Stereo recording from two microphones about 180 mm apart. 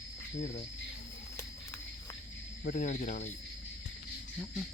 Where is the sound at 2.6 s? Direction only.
45° left (ahead or behind).